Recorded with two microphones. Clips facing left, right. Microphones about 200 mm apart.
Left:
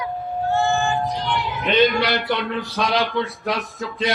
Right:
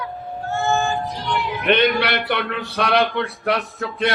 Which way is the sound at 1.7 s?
65° right (ahead or behind).